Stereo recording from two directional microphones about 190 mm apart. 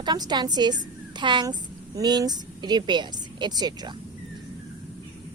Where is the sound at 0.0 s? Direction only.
20° right (ahead or behind).